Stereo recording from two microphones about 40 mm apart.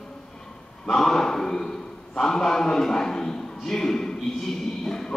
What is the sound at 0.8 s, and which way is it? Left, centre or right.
A man's voice, centre.